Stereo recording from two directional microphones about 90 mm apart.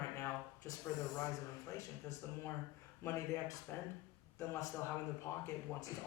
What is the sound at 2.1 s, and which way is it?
A man's voice, 35° left (ahead or behind).